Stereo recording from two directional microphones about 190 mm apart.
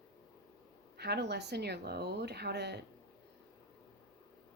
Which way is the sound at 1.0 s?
60° right (ahead or behind).